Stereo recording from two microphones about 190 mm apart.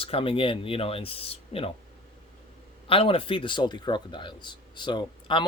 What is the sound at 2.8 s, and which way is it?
Speech, 30° left (ahead or behind).